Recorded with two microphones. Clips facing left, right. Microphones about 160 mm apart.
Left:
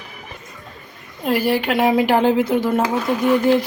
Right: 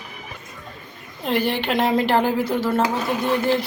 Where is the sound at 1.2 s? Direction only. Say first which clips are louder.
Left 3 dB; 5° left (ahead or behind).